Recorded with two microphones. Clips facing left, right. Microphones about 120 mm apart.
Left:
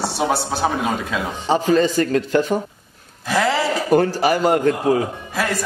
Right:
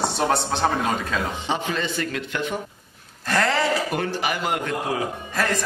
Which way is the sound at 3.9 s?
35° left (ahead or behind).